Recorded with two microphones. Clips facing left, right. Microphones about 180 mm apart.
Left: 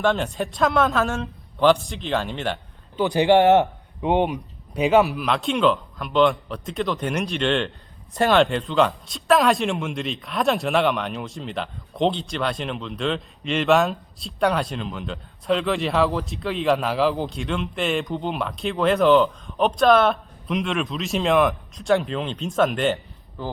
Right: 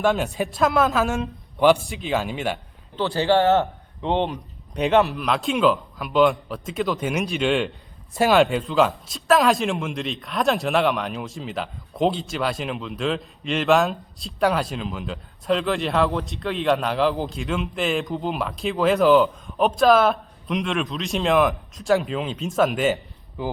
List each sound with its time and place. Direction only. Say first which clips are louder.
0.0 s speech: right 1 dB; 5° right (ahead or behind)
1.1 s speech: right 2 dB; 15° right (ahead or behind)
1.9 s speech: right 1 dB; 5° right (ahead or behind)
2.9 s speech: left 3 dB; 15° left (ahead or behind); by 23.5 s 15° right (ahead or behind)